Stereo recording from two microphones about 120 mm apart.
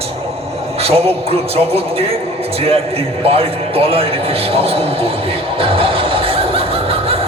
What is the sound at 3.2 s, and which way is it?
A man's voice, 55° right (ahead or behind).